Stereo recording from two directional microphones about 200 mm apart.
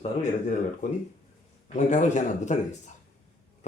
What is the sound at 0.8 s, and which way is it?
A man's voice, 40° left (ahead or behind).